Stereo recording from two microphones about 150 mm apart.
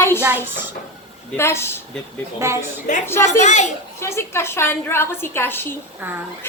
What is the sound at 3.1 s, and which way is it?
Speech, 15° left (ahead or behind).